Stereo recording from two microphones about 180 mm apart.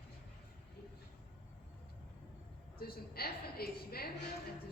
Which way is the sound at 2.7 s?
55° left (ahead or behind).